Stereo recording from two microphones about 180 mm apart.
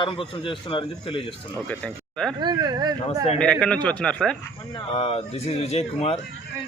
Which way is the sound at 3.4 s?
5° left (ahead or behind).